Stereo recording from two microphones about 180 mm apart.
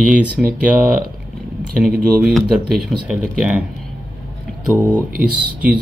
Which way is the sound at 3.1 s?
5° right (ahead or behind).